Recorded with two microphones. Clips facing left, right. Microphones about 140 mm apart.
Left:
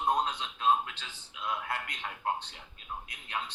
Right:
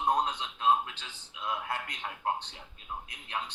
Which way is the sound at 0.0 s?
10° right (ahead or behind).